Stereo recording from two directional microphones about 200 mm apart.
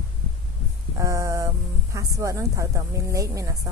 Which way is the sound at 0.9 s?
15° right (ahead or behind).